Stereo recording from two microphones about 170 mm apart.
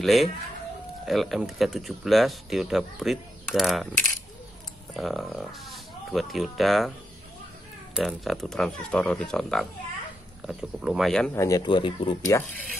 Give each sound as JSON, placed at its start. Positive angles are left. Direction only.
{"t": 0.0, "sound": "speech", "side_deg": 0}
{"t": 4.9, "sound": "speech", "side_deg": 0}
{"t": 7.9, "sound": "speech", "side_deg": 0}
{"t": 11.3, "sound": "speech", "side_deg": 20}